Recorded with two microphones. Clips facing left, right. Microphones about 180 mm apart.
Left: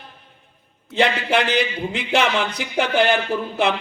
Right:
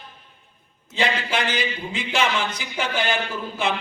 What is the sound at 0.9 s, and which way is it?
A man's voice, 60° left (ahead or behind).